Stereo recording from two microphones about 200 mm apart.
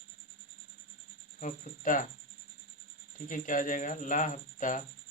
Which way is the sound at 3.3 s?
40° left (ahead or behind).